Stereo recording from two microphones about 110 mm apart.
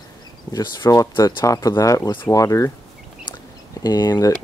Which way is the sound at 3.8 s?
35° left (ahead or behind).